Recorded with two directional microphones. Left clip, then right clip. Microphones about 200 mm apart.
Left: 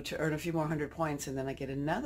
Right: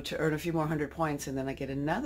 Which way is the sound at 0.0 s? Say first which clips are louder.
Right 3 dB; 10° right (ahead or behind).